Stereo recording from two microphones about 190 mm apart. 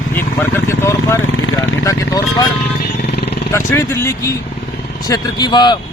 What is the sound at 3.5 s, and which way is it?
Speech, 15° left (ahead or behind).